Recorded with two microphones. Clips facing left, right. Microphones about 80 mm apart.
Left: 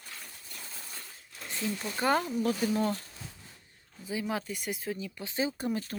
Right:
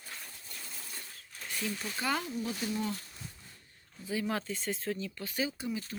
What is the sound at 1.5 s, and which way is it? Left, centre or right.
Speech, left.